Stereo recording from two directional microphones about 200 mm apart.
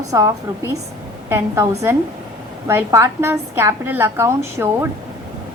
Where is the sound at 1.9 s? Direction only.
10° right (ahead or behind).